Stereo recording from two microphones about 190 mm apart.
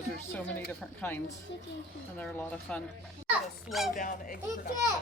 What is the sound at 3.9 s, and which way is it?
Speech, 45° left (ahead or behind).